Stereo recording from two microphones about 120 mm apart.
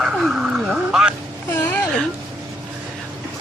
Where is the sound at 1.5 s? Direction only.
15° left (ahead or behind).